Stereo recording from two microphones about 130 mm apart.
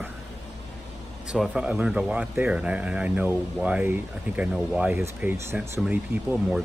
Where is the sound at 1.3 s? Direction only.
5° right (ahead or behind).